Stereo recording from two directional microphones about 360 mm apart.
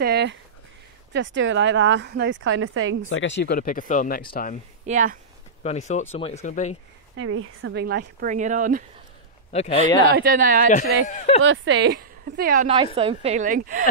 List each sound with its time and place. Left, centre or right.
0.0 s a woman's voice: right
3.1 s speech: left
4.8 s speech: right
5.6 s speech: centre
7.2 s a woman's voice: right
9.5 s a man's voice: centre
10.1 s a woman's voice: right
11.1 s speech: centre
11.4 s a woman's voice: right